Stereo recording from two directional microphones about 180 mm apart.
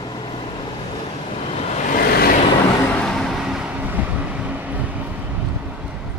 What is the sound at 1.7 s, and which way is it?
Vehicle, 55° left (ahead or behind).